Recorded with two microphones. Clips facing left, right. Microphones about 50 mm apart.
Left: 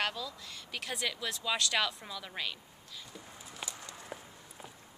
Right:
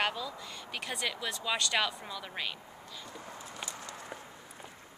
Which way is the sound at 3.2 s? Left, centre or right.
Right.